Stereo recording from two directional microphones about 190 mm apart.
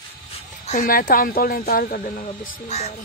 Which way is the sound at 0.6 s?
45° left (ahead or behind).